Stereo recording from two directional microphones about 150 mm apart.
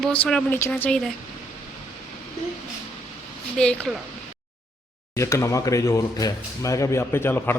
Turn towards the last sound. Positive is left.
turn(degrees=15)  # may be behind; listen again after turning